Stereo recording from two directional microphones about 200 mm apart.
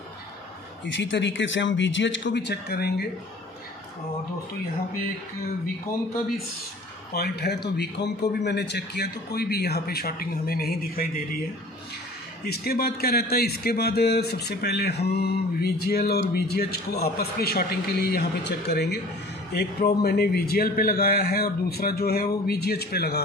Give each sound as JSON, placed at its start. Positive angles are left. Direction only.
{"t": 0.8, "sound": "speech", "side_deg": 65}
{"t": 7.2, "sound": "a man's voice", "side_deg": 55}
{"t": 12.4, "sound": "a man's voice", "side_deg": 50}